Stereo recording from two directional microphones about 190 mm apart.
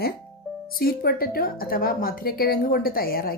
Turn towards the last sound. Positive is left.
turn(degrees=50)  # may be behind; listen again after turning